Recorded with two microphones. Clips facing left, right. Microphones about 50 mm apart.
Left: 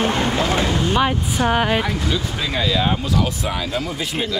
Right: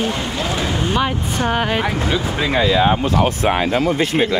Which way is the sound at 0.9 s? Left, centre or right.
Centre.